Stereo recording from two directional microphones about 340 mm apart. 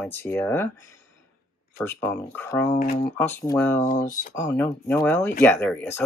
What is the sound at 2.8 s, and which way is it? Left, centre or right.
Speech, left.